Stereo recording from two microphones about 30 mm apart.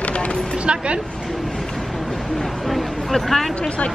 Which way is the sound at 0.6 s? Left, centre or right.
Right.